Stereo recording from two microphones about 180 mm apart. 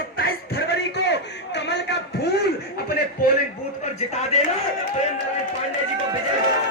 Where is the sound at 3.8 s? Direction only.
40° left (ahead or behind).